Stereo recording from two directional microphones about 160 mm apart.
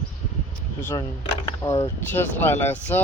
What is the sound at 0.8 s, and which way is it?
Speech, 15° left (ahead or behind).